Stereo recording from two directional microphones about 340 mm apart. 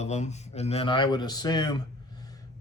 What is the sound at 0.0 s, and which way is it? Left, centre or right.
Speech, centre.